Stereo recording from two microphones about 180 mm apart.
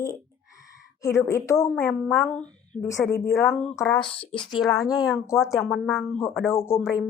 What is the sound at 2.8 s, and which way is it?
Speech, 15° left (ahead or behind).